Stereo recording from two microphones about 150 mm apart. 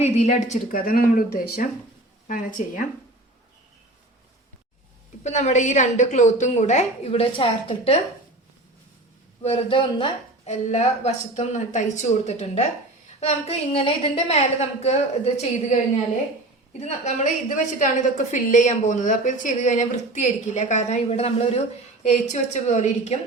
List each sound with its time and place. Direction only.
0.0 s a woman's voice: 45° left (ahead or behind)
0.8 s speech: 75° left (ahead or behind)
2.2 s a woman's voice: 60° left (ahead or behind)
5.2 s a woman's voice: 50° left (ahead or behind)
9.4 s speech: 45° left (ahead or behind)
10.4 s a woman's voice: 50° left (ahead or behind)
17.0 s a woman's voice: 55° left (ahead or behind)